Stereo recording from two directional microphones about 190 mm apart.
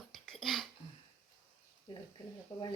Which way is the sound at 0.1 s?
Centre (ahead or behind).